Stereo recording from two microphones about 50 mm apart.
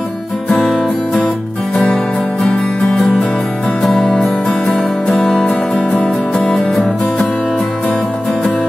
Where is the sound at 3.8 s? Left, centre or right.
Centre.